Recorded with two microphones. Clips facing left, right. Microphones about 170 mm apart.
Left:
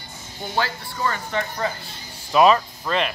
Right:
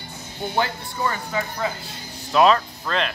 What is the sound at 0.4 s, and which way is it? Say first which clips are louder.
Speech: right 1 dB; 20° right (ahead or behind).